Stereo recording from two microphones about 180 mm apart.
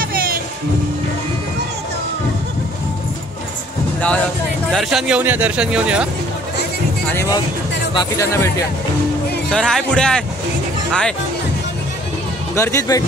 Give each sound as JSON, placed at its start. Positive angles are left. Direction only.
{"t": 0.0, "sound": "music", "side_deg": -55}
{"t": 4.6, "sound": "speech", "side_deg": 0}
{"t": 7.1, "sound": "speech", "side_deg": 15}
{"t": 9.5, "sound": "speech", "side_deg": 5}
{"t": 12.5, "sound": "speech", "side_deg": 15}